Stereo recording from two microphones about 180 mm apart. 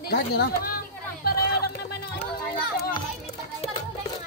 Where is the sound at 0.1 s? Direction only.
60° left (ahead or behind).